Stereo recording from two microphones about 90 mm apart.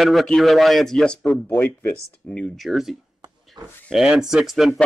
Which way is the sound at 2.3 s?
Centre (ahead or behind).